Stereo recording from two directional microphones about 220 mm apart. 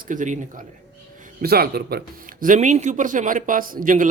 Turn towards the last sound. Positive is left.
turn(degrees=-40)  # may be behind; listen again after turning